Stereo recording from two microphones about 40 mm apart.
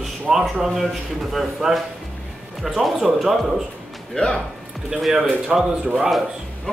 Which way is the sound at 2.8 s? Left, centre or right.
Centre.